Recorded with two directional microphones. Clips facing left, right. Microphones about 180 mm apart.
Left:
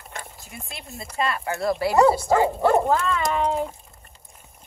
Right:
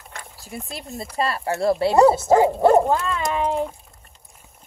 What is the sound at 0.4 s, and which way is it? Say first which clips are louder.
Speech: right 6 dB; 35° right (ahead or behind).